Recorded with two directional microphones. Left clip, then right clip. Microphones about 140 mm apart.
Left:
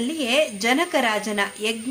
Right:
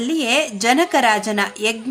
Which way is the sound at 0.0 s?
25° right (ahead or behind).